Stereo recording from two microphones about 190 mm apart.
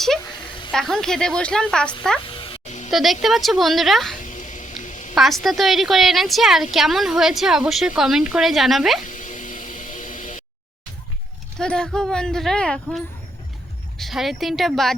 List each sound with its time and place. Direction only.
0.7 s a woman's voice: centre (ahead or behind)
2.2 s music: 25° left (ahead or behind)
2.9 s a woman's voice: centre (ahead or behind)
4.2 s quack: 40° left (ahead or behind)
5.1 s a woman's voice: centre (ahead or behind)
9.0 s vehicle: 40° left (ahead or behind)
11.6 s a woman's voice: 5° left (ahead or behind)
14.0 s a woman's voice: centre (ahead or behind)